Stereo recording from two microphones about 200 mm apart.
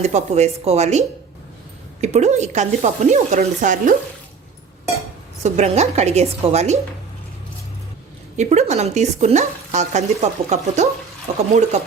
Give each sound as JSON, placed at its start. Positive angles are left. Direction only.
{"t": 0.0, "sound": "speech", "side_deg": -35}
{"t": 5.4, "sound": "speech", "side_deg": -35}
{"t": 8.4, "sound": "speech", "side_deg": -35}